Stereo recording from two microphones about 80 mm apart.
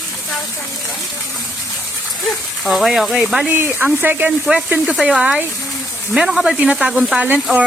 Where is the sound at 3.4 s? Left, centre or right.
Right.